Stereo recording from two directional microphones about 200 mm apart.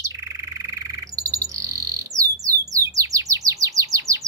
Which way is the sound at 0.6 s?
15° right (ahead or behind).